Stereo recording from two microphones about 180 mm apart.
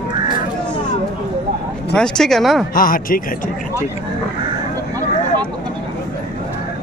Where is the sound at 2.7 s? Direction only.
50° left (ahead or behind).